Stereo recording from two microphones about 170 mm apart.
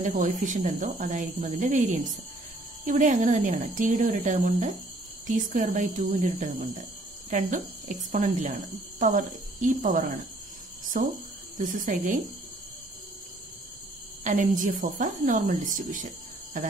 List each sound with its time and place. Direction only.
0.0 s speech: 50° right (ahead or behind)
1.4 s speech: 40° right (ahead or behind)
14.2 s speech: 50° right (ahead or behind)